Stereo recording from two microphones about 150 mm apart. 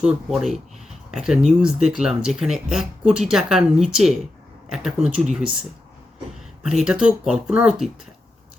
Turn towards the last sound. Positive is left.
turn(degrees=-5)  # may be behind; listen again after turning